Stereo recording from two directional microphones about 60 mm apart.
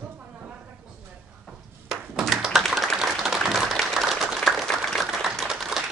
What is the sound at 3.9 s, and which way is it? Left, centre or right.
Applause, centre.